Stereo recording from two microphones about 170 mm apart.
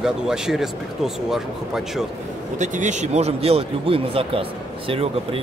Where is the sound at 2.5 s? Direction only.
45° right (ahead or behind).